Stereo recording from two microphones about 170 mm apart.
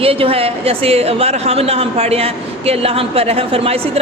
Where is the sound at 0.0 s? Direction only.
35° right (ahead or behind).